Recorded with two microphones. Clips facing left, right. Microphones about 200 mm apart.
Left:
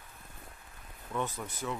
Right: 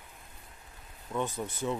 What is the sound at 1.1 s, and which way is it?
Speech, 20° right (ahead or behind).